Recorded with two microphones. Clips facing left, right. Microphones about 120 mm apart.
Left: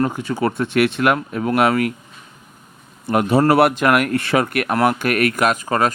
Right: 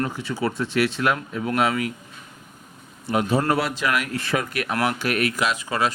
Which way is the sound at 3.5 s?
65° left (ahead or behind).